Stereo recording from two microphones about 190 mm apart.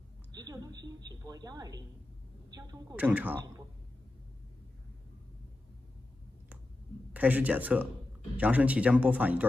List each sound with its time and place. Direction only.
0.3 s a woman's voice: 20° right (ahead or behind)
3.0 s speech: 10° right (ahead or behind)
7.2 s speech: 10° right (ahead or behind)